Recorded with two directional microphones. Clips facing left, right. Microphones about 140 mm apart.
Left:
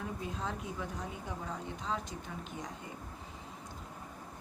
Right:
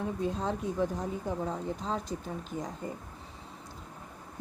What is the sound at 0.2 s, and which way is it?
A woman's voice, 35° right (ahead or behind).